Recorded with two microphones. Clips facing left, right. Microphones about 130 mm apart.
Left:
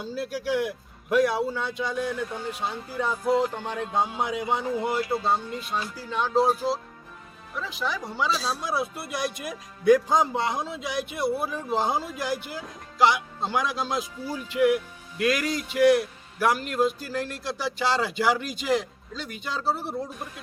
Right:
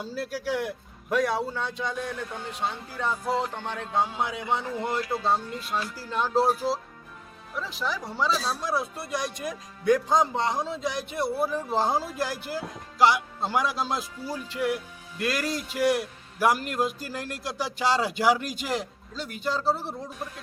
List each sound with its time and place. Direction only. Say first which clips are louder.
0.0 s a man's voice: left 1 dB; centre (ahead or behind)
4.9 s speech: left 2 dB; 25° left (ahead or behind)
5.2 s speech: even; centre (ahead or behind)